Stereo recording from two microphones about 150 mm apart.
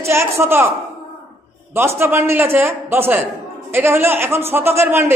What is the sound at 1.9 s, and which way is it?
A man's voice, 15° right (ahead or behind).